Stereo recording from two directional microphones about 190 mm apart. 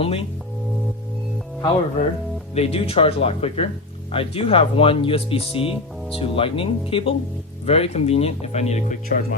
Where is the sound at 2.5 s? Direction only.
30° left (ahead or behind).